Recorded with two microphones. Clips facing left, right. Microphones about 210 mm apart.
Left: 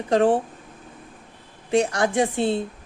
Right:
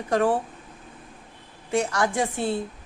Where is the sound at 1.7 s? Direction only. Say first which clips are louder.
Left 4 dB; 20° left (ahead or behind).